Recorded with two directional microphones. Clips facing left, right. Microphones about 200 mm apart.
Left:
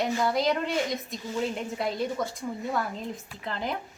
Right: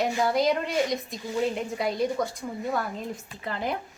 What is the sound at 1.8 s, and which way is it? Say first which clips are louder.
A woman's voice: right 2 dB; centre (ahead or behind).